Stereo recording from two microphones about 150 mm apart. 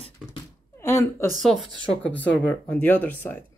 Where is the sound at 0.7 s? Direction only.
15° left (ahead or behind).